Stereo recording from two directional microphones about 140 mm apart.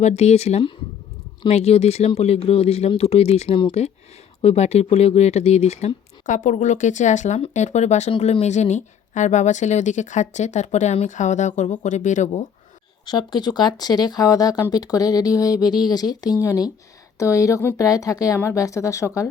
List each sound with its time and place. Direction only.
0.0 s a woman's voice: 50° left (ahead or behind)
13.1 s speech: 30° left (ahead or behind)